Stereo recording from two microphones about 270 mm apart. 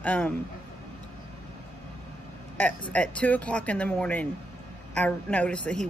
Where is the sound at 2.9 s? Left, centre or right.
Centre.